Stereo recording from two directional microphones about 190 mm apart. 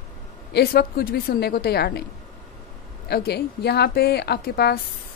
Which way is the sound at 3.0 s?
60° left (ahead or behind).